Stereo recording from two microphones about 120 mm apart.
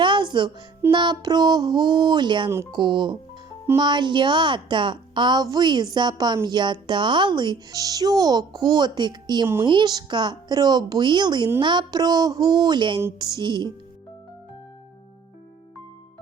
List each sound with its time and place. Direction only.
0.0 s music: 40° right (ahead or behind)
0.9 s a woman's voice: 35° right (ahead or behind)